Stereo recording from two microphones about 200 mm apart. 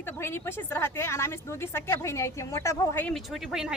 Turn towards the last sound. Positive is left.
turn(degrees=0)  # may be behind; listen again after turning